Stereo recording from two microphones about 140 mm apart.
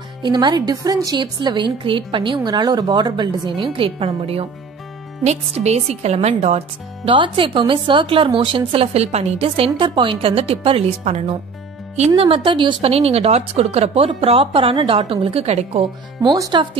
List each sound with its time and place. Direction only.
0.2 s a woman's voice: 30° right (ahead or behind)
5.2 s a woman's voice: 55° right (ahead or behind)
7.1 s a woman's voice: 40° right (ahead or behind)
9.7 s a woman's voice: 35° right (ahead or behind)